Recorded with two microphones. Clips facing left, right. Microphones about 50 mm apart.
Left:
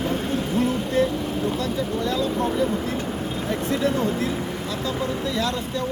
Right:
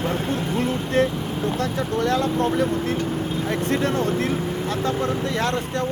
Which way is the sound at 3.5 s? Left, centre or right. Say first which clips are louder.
Even; right.